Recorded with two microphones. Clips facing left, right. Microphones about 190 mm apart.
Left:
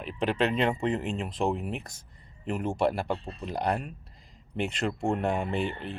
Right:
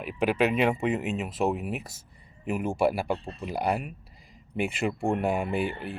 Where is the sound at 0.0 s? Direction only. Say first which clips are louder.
Right 2 dB; 10° right (ahead or behind).